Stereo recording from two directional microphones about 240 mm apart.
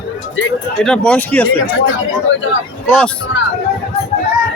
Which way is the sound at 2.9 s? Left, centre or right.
Centre.